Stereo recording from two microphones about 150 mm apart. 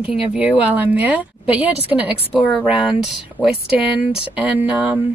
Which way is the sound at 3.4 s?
5° right (ahead or behind).